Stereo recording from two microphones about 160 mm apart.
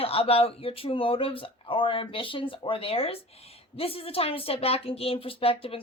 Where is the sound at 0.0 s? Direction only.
35° left (ahead or behind).